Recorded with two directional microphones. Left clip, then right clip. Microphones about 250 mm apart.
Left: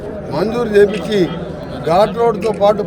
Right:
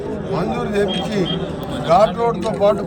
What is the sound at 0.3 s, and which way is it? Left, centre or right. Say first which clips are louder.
A man's voice: left 8 dB; centre.